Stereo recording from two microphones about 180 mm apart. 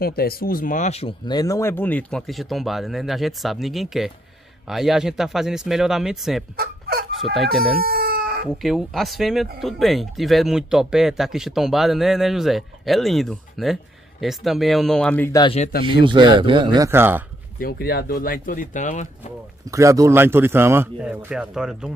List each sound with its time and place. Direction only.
0.0 s speech: 60° left (ahead or behind); by 6.4 s centre (ahead or behind)
6.5 s fowl: 55° right (ahead or behind)
7.5 s speech: centre (ahead or behind)
7.8 s chicken: 55° right (ahead or behind)
8.5 s speech: centre (ahead or behind)
15.3 s speech: 25° left (ahead or behind)
16.1 s speech: 25° right (ahead or behind)
17.6 s speech: 55° left (ahead or behind)
19.7 s speech: 15° right (ahead or behind)